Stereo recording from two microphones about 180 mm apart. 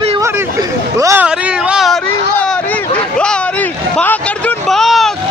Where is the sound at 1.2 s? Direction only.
5° right (ahead or behind).